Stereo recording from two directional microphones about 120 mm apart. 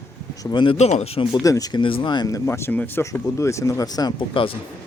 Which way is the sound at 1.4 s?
30° left (ahead or behind).